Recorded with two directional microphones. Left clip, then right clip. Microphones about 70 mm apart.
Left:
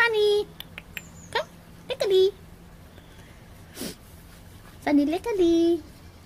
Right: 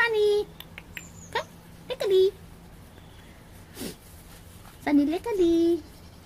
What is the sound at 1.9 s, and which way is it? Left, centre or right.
Speech, left.